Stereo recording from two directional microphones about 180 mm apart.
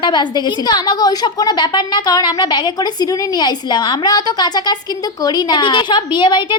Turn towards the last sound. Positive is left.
turn(degrees=25)  # may be behind; listen again after turning